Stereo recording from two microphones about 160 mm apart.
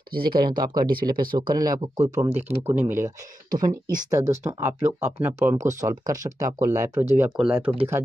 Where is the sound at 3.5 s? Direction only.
60° right (ahead or behind).